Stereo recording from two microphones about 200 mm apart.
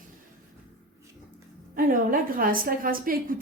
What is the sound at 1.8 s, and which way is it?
Speech, 45° right (ahead or behind).